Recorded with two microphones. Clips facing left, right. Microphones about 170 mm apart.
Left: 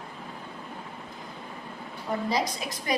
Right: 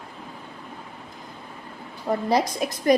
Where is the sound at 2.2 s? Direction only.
55° right (ahead or behind).